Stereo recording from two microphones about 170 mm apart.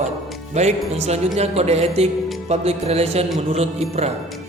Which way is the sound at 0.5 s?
40° right (ahead or behind).